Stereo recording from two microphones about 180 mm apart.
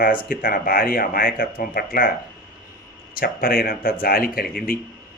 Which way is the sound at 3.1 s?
55° left (ahead or behind).